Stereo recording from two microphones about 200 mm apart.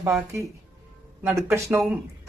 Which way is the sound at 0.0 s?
15° right (ahead or behind).